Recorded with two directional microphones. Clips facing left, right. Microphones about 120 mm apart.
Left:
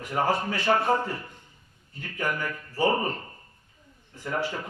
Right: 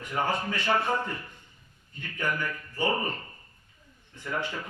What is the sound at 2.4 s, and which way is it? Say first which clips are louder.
Speech: left 4 dB; 35° left (ahead or behind).